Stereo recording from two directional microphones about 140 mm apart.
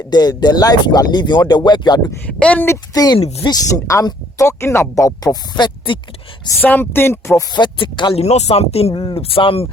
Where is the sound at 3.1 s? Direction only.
40° left (ahead or behind).